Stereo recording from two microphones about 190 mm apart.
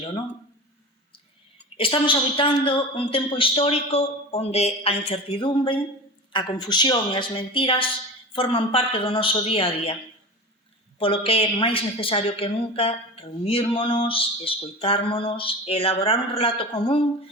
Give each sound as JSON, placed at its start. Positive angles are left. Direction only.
{"t": 1.7, "sound": "a woman's voice", "side_deg": 30}
{"t": 11.0, "sound": "a woman's voice", "side_deg": 30}